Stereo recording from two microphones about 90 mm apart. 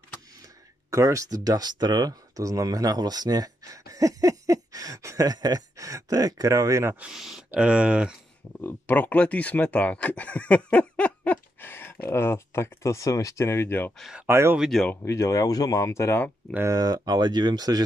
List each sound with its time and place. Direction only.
0.8 s speech: 35° right (ahead or behind)
7.0 s speech: 5° right (ahead or behind)
8.5 s speech: 25° left (ahead or behind)
14.2 s speech: 25° right (ahead or behind)
14.6 s speech: centre (ahead or behind)
15.1 s speech: 40° left (ahead or behind)
16.6 s speech: 45° right (ahead or behind)